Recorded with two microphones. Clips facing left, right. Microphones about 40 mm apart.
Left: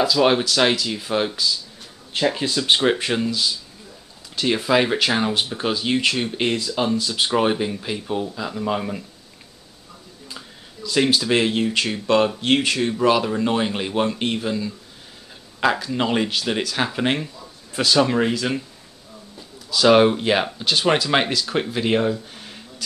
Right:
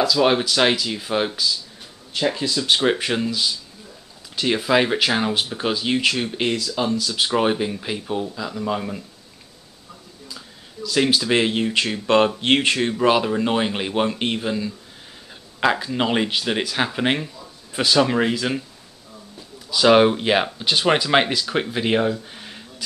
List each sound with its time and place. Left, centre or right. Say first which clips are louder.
0.0 s speech: even; centre
2.3 s speech: left 1 dB; left
2.8 s speech: even; centre
6.5 s speech: left 1 dB; centre
10.8 s speech: even; centre
11.1 s speech: even; centre
12.4 s speech: right 1 dB; right
13.0 s speech: even; centre
15.9 s speech: even; centre
19.7 s speech: even; centre